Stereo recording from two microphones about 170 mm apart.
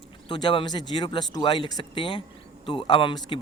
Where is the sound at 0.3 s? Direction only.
25° left (ahead or behind).